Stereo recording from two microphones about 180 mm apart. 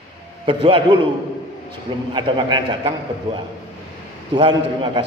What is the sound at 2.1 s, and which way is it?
Speech, 25° right (ahead or behind).